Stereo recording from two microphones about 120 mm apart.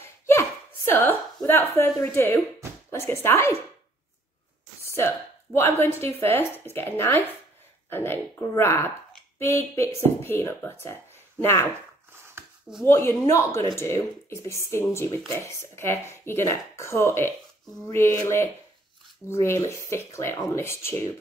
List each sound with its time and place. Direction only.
0.0 s hiccup: 20° left (ahead or behind)
1.8 s speech: 20° left (ahead or behind)
4.9 s speech: 20° left (ahead or behind)
12.8 s speech: 20° left (ahead or behind)